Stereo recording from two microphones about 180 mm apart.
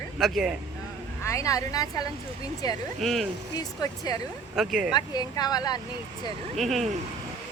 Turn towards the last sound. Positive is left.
turn(degrees=0)  # may be behind; listen again after turning